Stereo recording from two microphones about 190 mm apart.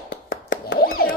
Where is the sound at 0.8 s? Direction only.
50° left (ahead or behind).